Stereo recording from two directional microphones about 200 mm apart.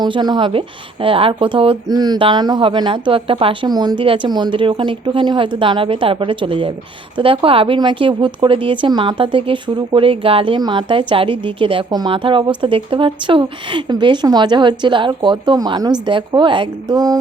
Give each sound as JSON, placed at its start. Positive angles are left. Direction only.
{"t": 0.0, "sound": "speech", "side_deg": -20}